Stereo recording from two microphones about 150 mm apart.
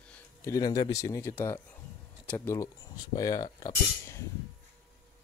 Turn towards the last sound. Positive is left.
turn(degrees=25)  # may be behind; listen again after turning